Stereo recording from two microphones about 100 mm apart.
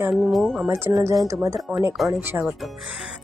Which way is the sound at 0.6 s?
25° right (ahead or behind).